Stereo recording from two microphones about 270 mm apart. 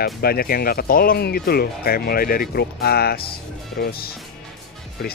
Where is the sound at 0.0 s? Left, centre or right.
Left.